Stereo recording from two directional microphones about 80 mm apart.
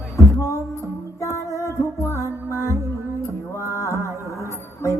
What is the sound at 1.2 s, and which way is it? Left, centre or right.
Music, left.